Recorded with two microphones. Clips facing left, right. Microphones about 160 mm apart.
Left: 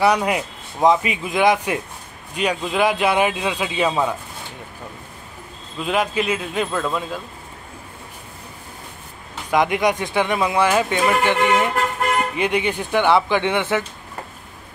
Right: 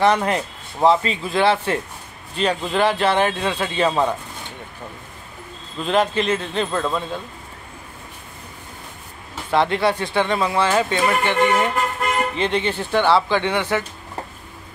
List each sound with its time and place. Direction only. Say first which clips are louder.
0.0 s speech: even; 10° left (ahead or behind)
5.8 s speech: right 2 dB; 10° left (ahead or behind)
9.5 s speech: even; 15° left (ahead or behind)